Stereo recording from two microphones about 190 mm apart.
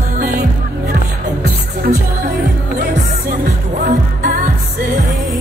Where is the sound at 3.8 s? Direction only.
45° right (ahead or behind).